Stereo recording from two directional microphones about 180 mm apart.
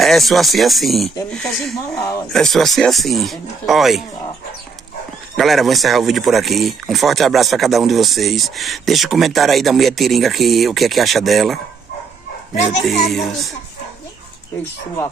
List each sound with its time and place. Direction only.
0.0 s speech: centre (ahead or behind)
1.9 s speech: 20° left (ahead or behind)
2.3 s speech: centre (ahead or behind)
5.4 s speech: centre (ahead or behind)
13.1 s speech: centre (ahead or behind)